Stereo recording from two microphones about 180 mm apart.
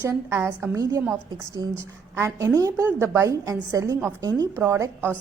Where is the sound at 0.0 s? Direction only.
15° right (ahead or behind).